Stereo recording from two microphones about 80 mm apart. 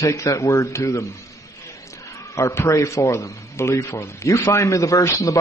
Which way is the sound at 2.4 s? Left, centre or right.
Left.